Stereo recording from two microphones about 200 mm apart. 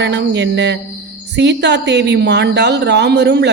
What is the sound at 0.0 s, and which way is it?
A woman's voice, 60° right (ahead or behind).